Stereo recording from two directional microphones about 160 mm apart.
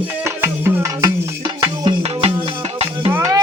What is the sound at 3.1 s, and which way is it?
Music, 15° right (ahead or behind).